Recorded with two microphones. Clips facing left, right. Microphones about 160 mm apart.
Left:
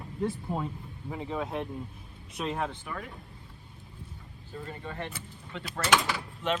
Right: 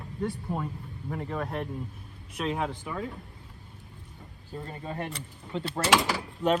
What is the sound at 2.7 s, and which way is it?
Speech, 15° right (ahead or behind).